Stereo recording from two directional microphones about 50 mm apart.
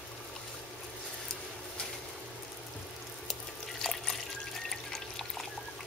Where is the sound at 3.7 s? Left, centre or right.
Centre.